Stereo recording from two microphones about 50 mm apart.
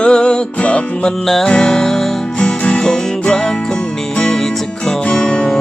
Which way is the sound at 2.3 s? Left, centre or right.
Left.